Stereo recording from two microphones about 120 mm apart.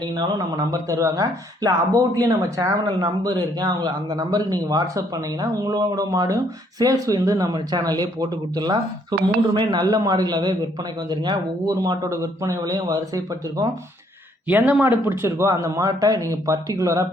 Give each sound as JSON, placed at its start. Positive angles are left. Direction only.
{"t": 0.2, "sound": "speech", "side_deg": -35}
{"t": 14.4, "sound": "speech", "side_deg": -15}